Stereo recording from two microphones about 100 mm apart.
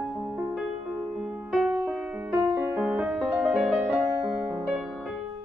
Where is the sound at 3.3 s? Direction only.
5° right (ahead or behind).